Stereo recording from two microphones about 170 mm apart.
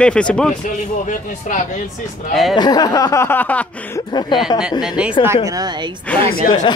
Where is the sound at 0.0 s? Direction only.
5° left (ahead or behind).